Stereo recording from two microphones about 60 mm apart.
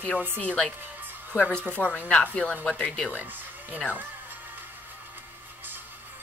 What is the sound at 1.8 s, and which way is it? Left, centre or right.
Speech, centre.